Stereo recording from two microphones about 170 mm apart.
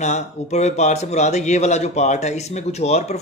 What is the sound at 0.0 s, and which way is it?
A man's voice, 45° left (ahead or behind).